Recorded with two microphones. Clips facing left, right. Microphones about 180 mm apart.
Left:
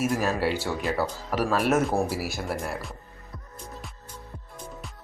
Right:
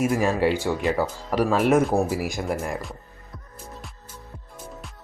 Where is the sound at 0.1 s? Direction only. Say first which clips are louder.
Right 4 dB; centre (ahead or behind).